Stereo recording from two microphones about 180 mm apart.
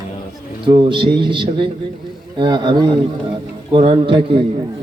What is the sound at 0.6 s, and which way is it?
A man's voice, 25° right (ahead or behind).